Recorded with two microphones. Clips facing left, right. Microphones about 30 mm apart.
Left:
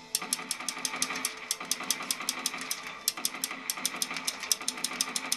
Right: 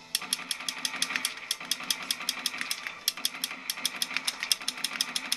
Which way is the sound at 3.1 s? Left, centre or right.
Right.